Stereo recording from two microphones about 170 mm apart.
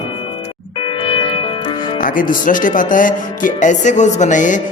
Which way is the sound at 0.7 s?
30° left (ahead or behind).